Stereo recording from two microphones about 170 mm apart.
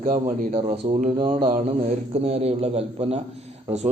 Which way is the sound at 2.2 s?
35° right (ahead or behind).